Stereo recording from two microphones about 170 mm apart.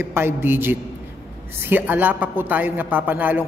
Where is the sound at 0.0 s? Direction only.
15° right (ahead or behind).